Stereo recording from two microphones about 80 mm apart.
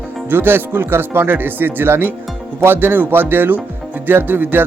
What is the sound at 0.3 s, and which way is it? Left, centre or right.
Speech, right.